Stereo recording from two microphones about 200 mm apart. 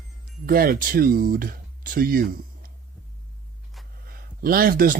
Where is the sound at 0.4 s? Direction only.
45° right (ahead or behind).